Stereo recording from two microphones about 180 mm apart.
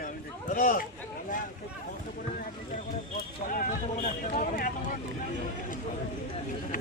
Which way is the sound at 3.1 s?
50° left (ahead or behind).